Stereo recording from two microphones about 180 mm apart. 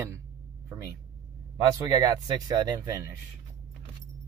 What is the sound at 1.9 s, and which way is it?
Speech, 20° right (ahead or behind).